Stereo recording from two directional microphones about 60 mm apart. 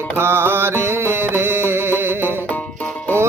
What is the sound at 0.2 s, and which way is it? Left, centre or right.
Music, right.